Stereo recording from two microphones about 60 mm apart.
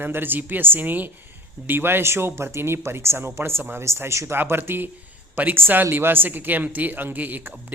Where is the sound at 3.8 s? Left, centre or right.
Right.